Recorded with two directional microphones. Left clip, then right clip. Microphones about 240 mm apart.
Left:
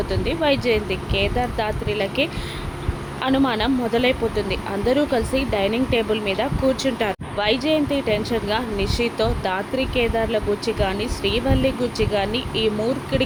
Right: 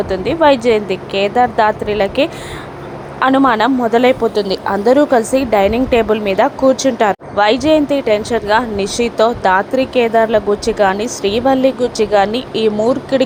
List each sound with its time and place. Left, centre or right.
0.1 s a woman's voice: centre
4.4 s speech: right
4.9 s a woman's voice: centre